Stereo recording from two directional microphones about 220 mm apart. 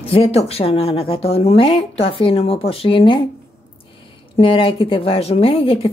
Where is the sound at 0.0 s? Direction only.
25° left (ahead or behind).